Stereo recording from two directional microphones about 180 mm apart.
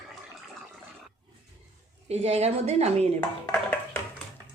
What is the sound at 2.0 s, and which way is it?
Speech, 35° right (ahead or behind).